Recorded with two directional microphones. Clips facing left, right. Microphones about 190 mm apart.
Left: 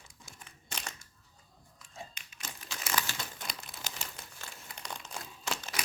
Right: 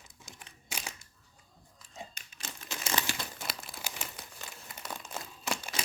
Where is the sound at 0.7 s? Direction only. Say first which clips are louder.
Right 1 dB; 10° right (ahead or behind).